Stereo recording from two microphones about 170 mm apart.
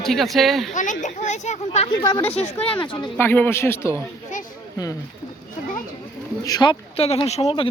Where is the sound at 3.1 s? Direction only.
10° left (ahead or behind).